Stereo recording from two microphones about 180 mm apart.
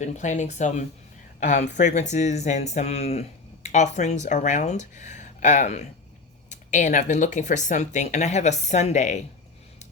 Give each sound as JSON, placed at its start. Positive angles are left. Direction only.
{"t": 0.0, "sound": "speech", "side_deg": 40}